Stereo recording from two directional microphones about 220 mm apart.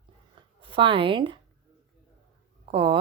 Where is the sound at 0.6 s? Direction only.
25° right (ahead or behind).